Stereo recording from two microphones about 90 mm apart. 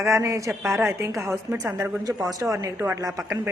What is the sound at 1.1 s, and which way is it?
Speech, centre (ahead or behind).